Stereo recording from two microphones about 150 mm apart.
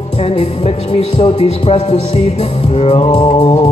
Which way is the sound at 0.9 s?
40° left (ahead or behind).